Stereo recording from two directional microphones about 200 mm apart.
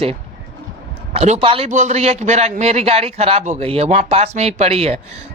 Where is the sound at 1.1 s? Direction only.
30° right (ahead or behind).